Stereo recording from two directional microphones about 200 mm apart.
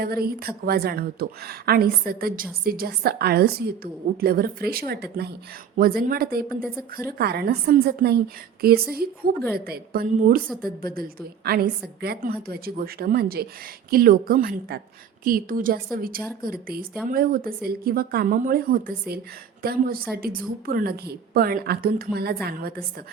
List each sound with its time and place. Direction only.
0.0 s a woman's voice: 50° right (ahead or behind)
11.4 s a woman's voice: 50° right (ahead or behind)